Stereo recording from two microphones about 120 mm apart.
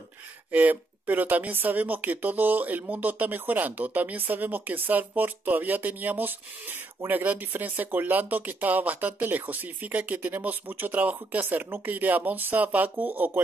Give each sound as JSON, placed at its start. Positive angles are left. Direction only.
{"t": 0.5, "sound": "speech", "side_deg": -15}